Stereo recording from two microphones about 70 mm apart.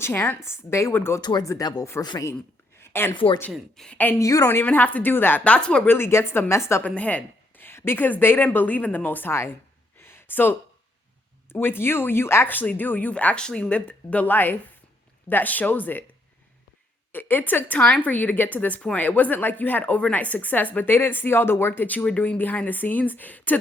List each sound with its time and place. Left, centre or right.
0.0 s speech: left
1.2 s speech: left
2.0 s speech: left
2.8 s a woman's voice: left
3.8 s a woman's voice: centre
4.2 s a woman's voice: left
4.4 s a woman's voice: left
5.4 s speech: centre
5.8 s a woman's voice: left
6.8 s a woman's voice: left
10.0 s a sound: left
11.4 s a woman's voice: left
17.1 s a woman's voice: left